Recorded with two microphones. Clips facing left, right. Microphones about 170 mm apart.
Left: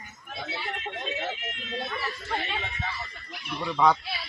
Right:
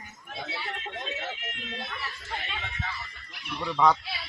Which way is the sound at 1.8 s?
55° left (ahead or behind).